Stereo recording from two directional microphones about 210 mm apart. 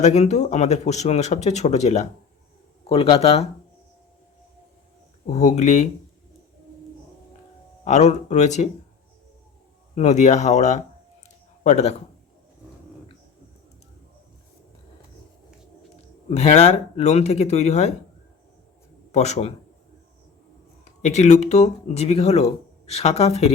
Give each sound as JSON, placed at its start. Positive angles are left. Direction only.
{"t": 0.0, "sound": "a man's voice", "side_deg": 30}
{"t": 5.2, "sound": "speech", "side_deg": 35}
{"t": 7.9, "sound": "speech", "side_deg": 35}
{"t": 9.9, "sound": "speech", "side_deg": 35}
{"t": 16.3, "sound": "speech", "side_deg": 30}
{"t": 19.1, "sound": "speech", "side_deg": 30}
{"t": 20.8, "sound": "speech", "side_deg": 30}